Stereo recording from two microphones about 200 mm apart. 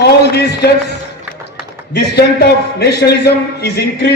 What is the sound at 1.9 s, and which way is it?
A man's voice, 55° left (ahead or behind).